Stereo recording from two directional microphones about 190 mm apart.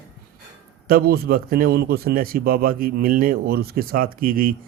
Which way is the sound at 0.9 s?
55° right (ahead or behind).